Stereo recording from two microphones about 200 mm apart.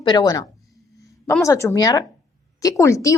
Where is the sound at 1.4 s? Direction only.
15° left (ahead or behind).